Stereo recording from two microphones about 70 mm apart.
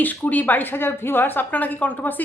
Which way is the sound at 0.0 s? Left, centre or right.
Left.